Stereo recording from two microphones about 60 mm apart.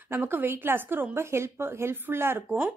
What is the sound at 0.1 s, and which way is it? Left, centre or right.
Speech, right.